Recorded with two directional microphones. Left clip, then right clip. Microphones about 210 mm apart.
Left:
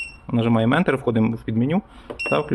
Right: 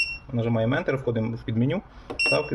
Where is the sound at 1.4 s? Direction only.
15° left (ahead or behind).